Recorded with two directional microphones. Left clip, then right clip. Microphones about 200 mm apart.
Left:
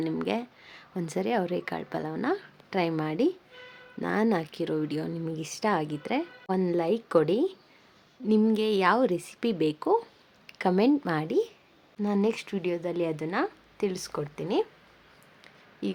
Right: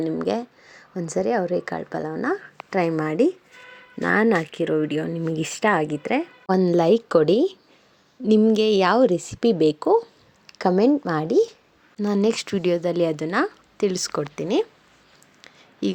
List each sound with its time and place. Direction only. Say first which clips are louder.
0.0 s speech: right 6 dB; 10° right (ahead or behind)
0.8 s a sound: right 6 dB; 10° left (ahead or behind)
1.2 s speech: right 6 dB; 10° right (ahead or behind)
2.6 s speech: right 6 dB; 15° right (ahead or behind)
3.1 s speech: right 7 dB; centre (ahead or behind)
5.2 s speech: right 9 dB; 15° right (ahead or behind)
6.7 s speech: right 7 dB; 30° right (ahead or behind)
15.8 s speech: right 8 dB; 30° right (ahead or behind)